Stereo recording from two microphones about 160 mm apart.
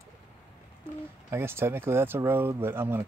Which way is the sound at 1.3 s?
15° right (ahead or behind).